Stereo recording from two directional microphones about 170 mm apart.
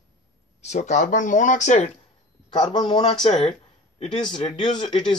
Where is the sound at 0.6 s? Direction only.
45° left (ahead or behind).